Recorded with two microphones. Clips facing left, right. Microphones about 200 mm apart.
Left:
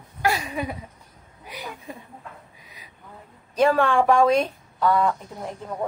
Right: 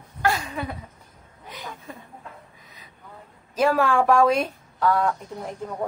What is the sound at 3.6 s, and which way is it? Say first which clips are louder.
Speech: left 1 dB; 5° right (ahead or behind).